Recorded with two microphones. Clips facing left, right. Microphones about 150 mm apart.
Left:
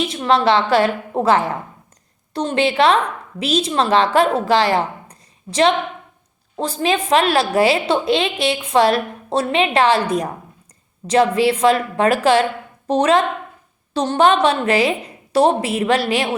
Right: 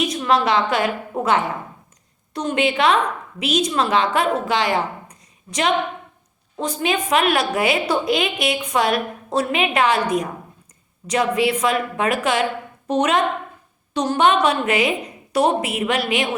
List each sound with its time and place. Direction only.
0.0 s a woman's voice: 30° left (ahead or behind)